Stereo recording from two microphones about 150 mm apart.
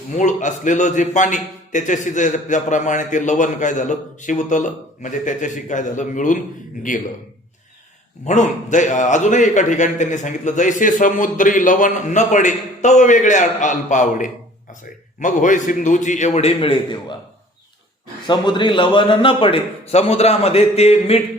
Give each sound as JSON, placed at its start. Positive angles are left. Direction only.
{"t": 0.1, "sound": "a man's voice", "side_deg": 55}
{"t": 8.2, "sound": "a man's voice", "side_deg": 50}
{"t": 18.3, "sound": "a man's voice", "side_deg": 30}